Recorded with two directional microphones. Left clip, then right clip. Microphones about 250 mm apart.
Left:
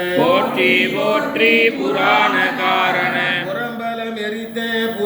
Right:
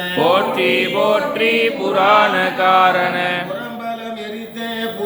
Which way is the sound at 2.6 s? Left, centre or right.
Right.